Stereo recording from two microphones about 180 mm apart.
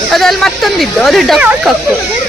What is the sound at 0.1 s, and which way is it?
Speech, centre (ahead or behind).